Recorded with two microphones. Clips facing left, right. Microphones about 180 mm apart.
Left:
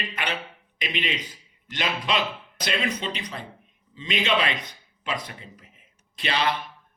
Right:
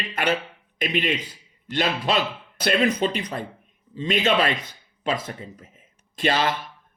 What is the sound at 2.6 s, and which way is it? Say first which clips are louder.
Speech: right 7 dB; 50° right (ahead or behind).